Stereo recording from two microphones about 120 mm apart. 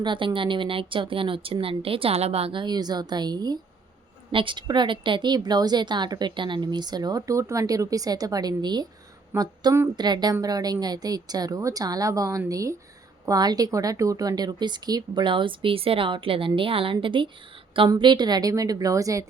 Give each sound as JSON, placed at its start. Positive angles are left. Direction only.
{"t": 0.0, "sound": "a woman's voice", "side_deg": -40}